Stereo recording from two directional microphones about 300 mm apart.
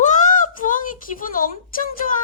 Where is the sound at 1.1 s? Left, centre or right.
Left.